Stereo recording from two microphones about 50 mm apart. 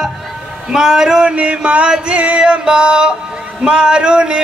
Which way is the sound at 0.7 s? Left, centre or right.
Centre.